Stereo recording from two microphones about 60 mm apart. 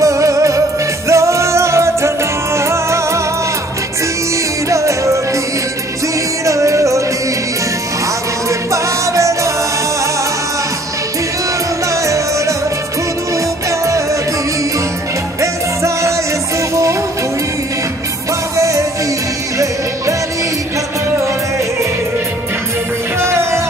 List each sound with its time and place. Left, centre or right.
0.0 s music: right
4.6 s music: right
6.4 s music: right
8.5 s music: right
11.9 s music: right
13.7 s music: right
15.4 s music: right
18.6 s music: right
23.2 s music: right